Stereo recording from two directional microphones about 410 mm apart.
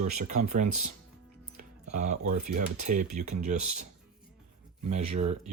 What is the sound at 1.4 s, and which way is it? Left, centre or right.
Music, right.